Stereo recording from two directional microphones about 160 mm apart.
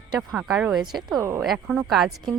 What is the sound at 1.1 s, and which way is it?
Speech, 15° right (ahead or behind).